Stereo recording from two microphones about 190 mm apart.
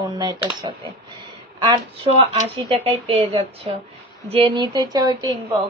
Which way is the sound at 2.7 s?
30° right (ahead or behind).